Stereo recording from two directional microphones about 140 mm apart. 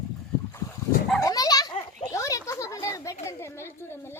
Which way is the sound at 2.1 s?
25° left (ahead or behind).